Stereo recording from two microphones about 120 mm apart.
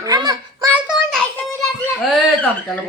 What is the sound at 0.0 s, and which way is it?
Child singing, 35° right (ahead or behind).